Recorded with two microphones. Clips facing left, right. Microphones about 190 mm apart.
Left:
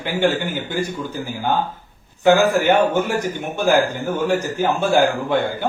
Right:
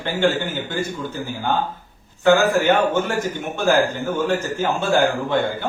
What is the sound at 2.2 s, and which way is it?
A man's voice, 15° left (ahead or behind).